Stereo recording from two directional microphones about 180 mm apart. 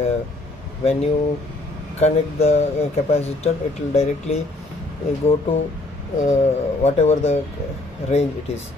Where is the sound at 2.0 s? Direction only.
35° left (ahead or behind).